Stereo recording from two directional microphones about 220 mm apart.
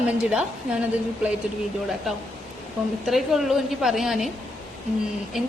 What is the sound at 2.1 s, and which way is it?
A woman's voice, centre (ahead or behind).